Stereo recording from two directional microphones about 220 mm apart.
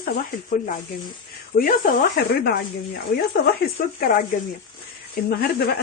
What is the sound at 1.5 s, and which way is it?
Speech, 40° left (ahead or behind).